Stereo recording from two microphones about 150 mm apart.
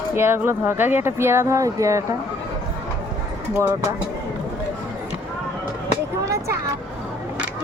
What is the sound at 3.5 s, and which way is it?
Speech, 20° right (ahead or behind).